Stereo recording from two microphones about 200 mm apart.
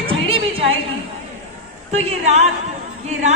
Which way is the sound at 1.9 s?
30° right (ahead or behind).